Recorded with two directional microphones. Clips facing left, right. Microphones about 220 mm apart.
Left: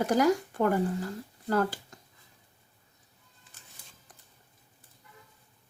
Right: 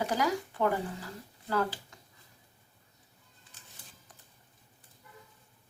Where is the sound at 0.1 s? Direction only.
45° left (ahead or behind).